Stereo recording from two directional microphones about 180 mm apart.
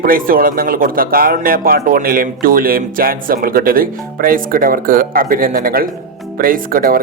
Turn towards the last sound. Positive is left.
turn(degrees=-55)  # may be behind; listen again after turning